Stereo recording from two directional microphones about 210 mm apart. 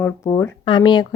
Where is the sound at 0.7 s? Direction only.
20° left (ahead or behind).